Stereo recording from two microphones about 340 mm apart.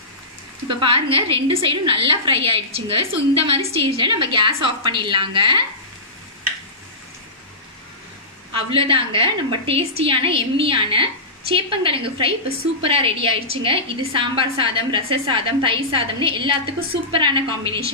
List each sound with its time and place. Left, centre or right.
0.7 s a woman's voice: centre
8.7 s a woman's voice: centre